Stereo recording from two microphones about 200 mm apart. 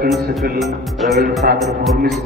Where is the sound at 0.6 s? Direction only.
Centre (ahead or behind).